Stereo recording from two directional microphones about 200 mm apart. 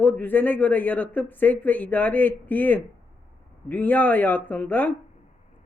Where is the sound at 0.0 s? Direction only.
10° left (ahead or behind).